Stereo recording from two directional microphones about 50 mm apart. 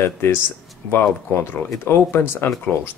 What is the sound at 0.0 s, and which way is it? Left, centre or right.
Speech, left.